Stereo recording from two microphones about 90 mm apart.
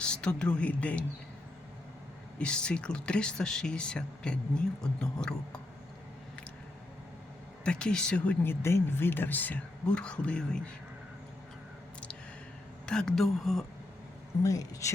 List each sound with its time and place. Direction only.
0.0 s speech: 10° left (ahead or behind)
2.4 s speech: 10° left (ahead or behind)
7.6 s speech: 10° left (ahead or behind)
8.4 s speech: 25° left (ahead or behind); by 10.6 s 10° left (ahead or behind)
12.8 s speech: 10° left (ahead or behind)
14.4 s speech: 40° left (ahead or behind)